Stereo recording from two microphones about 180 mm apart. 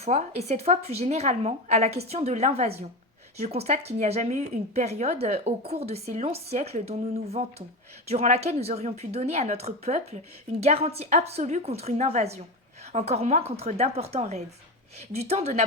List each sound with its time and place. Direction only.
0.0 s a woman's voice: 35° right (ahead or behind)